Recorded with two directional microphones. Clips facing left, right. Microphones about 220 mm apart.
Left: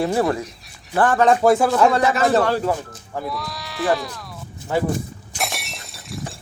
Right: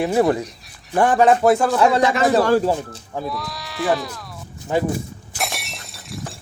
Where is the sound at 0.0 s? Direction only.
20° right (ahead or behind); by 2.0 s centre (ahead or behind).